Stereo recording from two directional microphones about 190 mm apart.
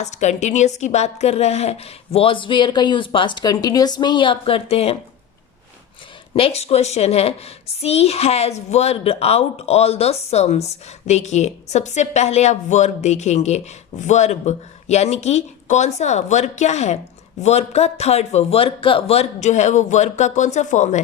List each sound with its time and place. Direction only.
0.0 s a woman's voice: 35° left (ahead or behind)
6.3 s a woman's voice: 30° left (ahead or behind)